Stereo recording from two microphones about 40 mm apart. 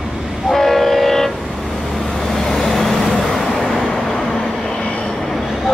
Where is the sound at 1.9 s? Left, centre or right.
Centre.